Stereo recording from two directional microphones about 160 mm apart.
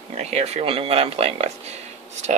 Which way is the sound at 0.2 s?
40° right (ahead or behind).